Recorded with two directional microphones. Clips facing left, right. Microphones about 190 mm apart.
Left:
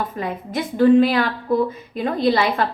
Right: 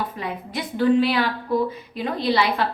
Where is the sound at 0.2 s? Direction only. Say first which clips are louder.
Left 4 dB; 50° left (ahead or behind).